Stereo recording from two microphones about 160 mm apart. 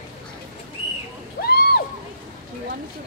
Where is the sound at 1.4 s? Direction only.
75° left (ahead or behind).